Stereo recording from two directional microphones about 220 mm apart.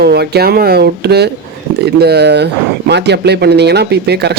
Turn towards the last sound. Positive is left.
turn(degrees=-50)  # may be behind; listen again after turning